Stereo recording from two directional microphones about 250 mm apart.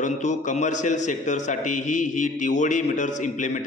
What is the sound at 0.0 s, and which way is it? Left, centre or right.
A man's voice, left.